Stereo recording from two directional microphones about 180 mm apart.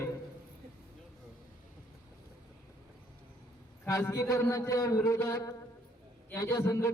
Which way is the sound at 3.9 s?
15° left (ahead or behind).